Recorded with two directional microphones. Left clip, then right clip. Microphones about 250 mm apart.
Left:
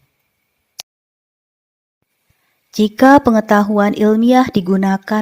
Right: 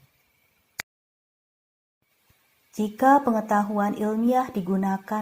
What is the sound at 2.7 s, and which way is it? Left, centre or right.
A woman's voice, left.